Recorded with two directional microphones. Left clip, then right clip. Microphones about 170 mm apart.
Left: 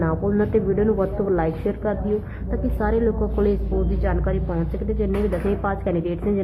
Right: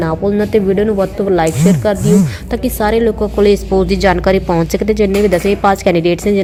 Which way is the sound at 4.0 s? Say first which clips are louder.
Right 14 dB; 40° right (ahead or behind).